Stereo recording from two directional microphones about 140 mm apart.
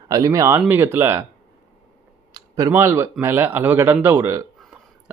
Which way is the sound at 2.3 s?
25° right (ahead or behind).